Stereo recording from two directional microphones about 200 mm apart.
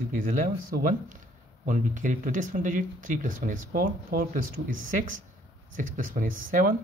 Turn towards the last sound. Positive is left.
turn(degrees=-45)  # may be behind; listen again after turning